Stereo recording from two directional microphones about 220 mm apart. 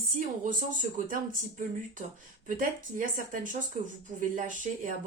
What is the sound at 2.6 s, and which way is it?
Speech, 35° right (ahead or behind).